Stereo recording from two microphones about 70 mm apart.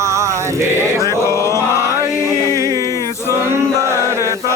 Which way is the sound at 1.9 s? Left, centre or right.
Right.